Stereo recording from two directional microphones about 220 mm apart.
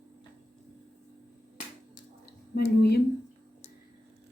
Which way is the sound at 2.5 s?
45° left (ahead or behind).